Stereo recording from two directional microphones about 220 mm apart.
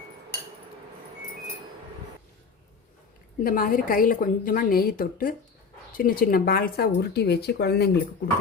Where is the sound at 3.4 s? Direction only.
40° left (ahead or behind).